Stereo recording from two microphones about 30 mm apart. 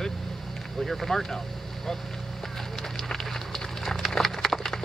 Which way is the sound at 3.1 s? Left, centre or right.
Centre.